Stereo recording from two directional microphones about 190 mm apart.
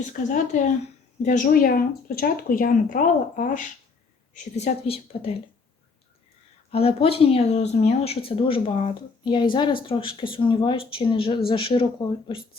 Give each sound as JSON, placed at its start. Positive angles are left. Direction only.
{"t": 0.0, "sound": "speech", "side_deg": 40}
{"t": 6.7, "sound": "speech", "side_deg": 30}